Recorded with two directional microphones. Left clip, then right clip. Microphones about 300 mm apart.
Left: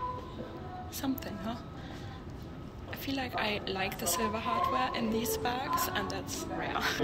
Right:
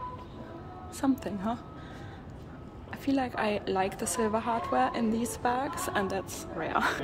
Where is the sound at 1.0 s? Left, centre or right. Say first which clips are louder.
Right 7 dB; right.